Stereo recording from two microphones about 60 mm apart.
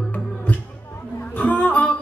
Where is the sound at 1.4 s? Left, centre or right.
Left.